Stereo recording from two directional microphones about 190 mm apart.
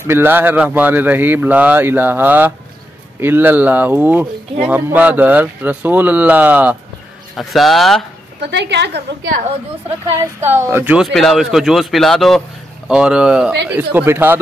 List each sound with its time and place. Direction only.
0.0 s a man's voice: 10° right (ahead or behind)
8.4 s a woman's voice: 65° right (ahead or behind)
10.5 s a man's voice: 10° right (ahead or behind)